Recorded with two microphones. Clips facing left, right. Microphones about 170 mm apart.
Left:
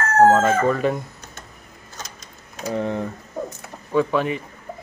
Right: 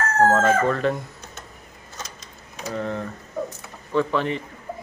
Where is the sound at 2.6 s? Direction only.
15° left (ahead or behind).